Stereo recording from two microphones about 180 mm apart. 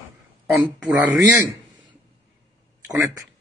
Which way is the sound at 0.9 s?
10° right (ahead or behind).